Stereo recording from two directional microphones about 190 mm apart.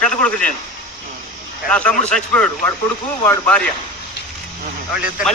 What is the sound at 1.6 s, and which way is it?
A man's voice, 5° left (ahead or behind).